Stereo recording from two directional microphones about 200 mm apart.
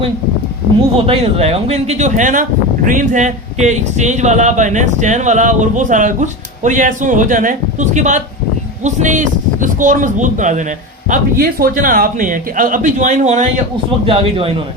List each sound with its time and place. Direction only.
0.9 s a man's voice: 30° right (ahead or behind)